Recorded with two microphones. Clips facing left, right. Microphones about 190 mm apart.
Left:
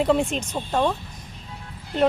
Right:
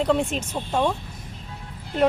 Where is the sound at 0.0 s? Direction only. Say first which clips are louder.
Left 1 dB; centre (ahead or behind).